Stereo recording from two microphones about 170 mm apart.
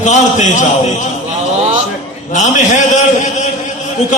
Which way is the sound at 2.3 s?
45° left (ahead or behind).